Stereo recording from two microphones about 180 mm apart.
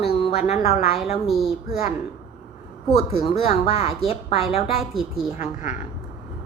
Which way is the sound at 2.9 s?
35° left (ahead or behind).